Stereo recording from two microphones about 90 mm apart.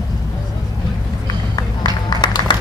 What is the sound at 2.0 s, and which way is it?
Music, 50° left (ahead or behind).